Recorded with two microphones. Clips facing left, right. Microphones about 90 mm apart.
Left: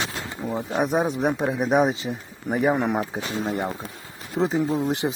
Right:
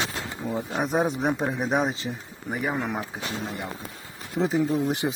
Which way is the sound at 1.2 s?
Centre (ahead or behind).